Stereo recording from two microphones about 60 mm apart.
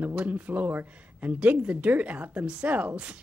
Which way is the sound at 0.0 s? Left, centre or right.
Right.